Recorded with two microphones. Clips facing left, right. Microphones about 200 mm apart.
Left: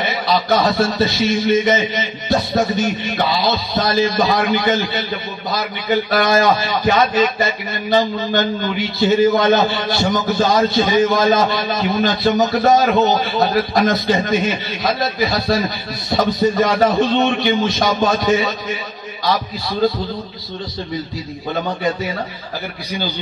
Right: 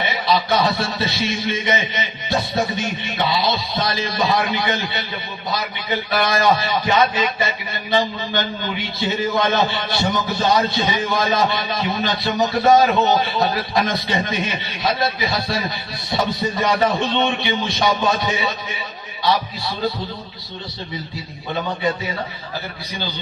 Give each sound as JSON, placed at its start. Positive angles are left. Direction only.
{"t": 0.0, "sound": "a man's voice", "side_deg": 40}